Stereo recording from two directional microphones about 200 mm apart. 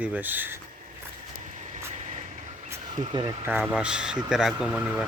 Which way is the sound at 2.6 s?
15° right (ahead or behind).